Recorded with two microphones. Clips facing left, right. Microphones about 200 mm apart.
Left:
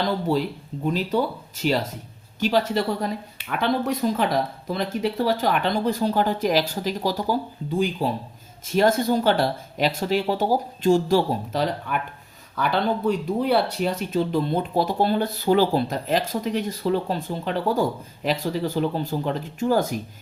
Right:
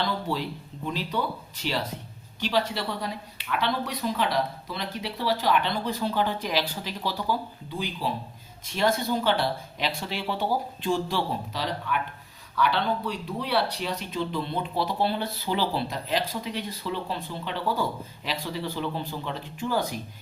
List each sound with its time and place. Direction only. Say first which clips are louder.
0.0 s speech: left 6 dB; 45° left (ahead or behind)